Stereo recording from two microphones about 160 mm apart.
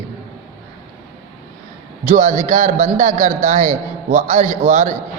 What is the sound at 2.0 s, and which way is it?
A man's voice, 50° right (ahead or behind).